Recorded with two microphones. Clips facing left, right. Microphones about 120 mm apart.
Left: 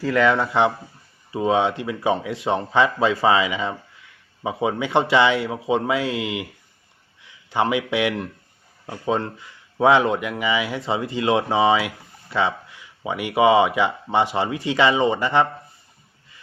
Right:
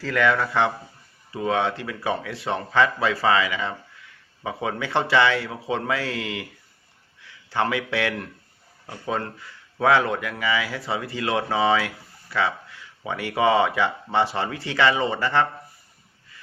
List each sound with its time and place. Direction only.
0.0 s a man's voice: 15° left (ahead or behind)